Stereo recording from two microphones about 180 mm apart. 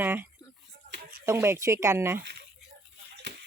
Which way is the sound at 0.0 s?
10° right (ahead or behind).